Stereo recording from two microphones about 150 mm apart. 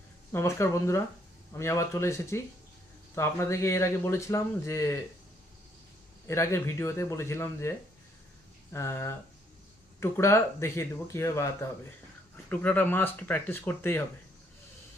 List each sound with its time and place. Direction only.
0.3 s speech: 20° left (ahead or behind)
6.2 s speech: 20° left (ahead or behind)